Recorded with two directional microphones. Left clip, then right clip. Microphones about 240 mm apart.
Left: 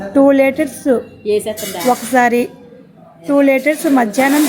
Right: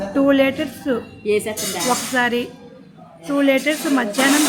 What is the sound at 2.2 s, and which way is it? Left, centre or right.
Speech, left.